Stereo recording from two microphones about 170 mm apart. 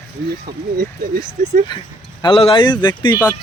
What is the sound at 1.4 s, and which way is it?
Speech, 40° right (ahead or behind).